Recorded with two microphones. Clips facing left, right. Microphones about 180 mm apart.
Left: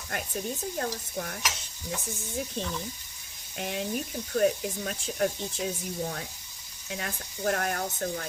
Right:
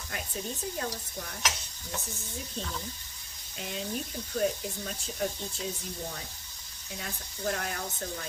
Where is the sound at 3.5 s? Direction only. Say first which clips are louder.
Left 4 dB; 60° left (ahead or behind).